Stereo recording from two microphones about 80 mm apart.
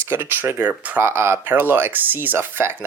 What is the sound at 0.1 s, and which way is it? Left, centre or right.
Speech, right.